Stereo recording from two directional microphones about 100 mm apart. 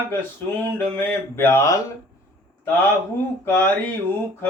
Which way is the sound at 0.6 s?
20° left (ahead or behind).